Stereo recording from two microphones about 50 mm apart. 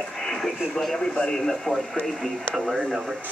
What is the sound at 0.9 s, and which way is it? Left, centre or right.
Speech, centre.